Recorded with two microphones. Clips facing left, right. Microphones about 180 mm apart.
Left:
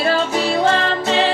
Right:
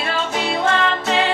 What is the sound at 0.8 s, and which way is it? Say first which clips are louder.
Music: left 1 dB; 30° left (ahead or behind).